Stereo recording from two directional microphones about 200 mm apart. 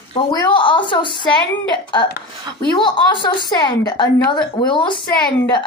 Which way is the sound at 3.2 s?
20° left (ahead or behind).